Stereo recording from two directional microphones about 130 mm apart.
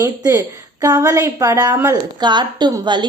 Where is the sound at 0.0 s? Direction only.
25° right (ahead or behind).